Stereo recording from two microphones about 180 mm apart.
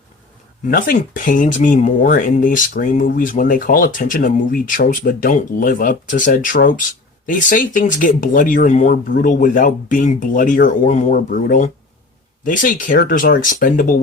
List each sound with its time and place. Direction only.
0.7 s speech: 50° left (ahead or behind)